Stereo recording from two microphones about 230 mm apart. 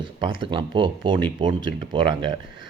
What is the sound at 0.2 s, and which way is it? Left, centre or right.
Speech, right.